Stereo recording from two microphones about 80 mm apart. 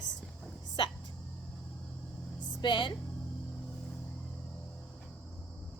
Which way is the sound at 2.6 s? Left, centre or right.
Left.